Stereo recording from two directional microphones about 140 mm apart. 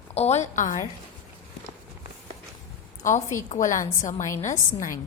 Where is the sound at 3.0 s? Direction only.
65° left (ahead or behind).